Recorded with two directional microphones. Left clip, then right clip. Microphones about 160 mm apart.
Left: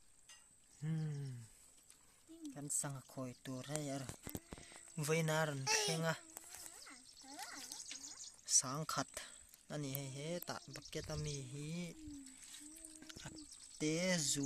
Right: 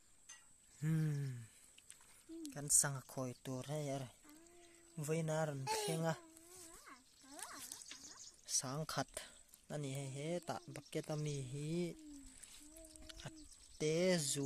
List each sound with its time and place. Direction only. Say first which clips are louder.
0.8 s a sound: right 4 dB; 15° right (ahead or behind)
2.4 s speech: right 6 dB; 20° right (ahead or behind)
5.0 s speech: left 3 dB; 5° right (ahead or behind)
8.5 s speech: left 4 dB; 15° right (ahead or behind)
13.0 s a sound: even; 20° right (ahead or behind)
13.7 s speech: right 2 dB; 20° right (ahead or behind)